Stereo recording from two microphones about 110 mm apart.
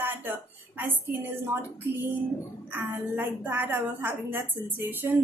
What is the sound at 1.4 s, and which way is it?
A woman's voice, 20° right (ahead or behind).